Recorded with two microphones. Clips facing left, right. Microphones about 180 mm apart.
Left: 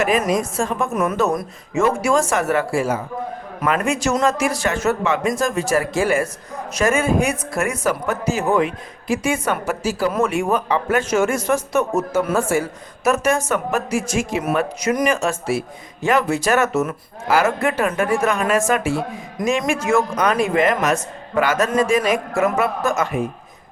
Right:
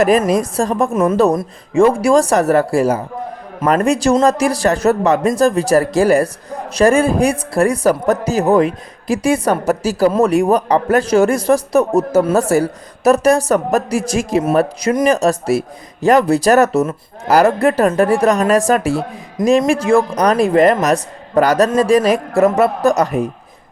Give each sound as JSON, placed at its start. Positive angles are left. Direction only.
{"t": 0.0, "sound": "speech", "side_deg": -40}